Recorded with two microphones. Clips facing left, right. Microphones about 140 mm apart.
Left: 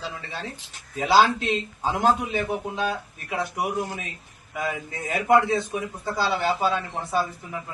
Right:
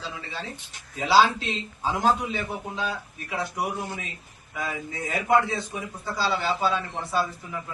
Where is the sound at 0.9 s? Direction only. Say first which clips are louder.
Left 1 dB; 50° left (ahead or behind).